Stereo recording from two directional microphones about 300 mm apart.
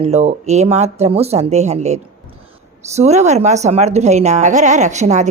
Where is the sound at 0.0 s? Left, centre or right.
Right.